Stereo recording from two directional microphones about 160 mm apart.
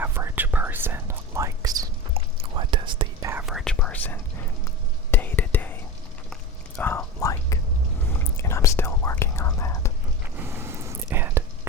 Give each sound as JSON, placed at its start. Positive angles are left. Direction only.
{"t": 0.0, "sound": "whispering", "side_deg": -15}
{"t": 2.1, "sound": "whispering", "side_deg": -35}
{"t": 3.4, "sound": "whispering", "side_deg": 0}
{"t": 10.3, "sound": "whispering", "side_deg": -15}